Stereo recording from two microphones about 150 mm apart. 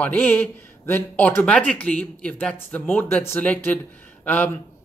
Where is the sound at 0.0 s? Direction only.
10° left (ahead or behind).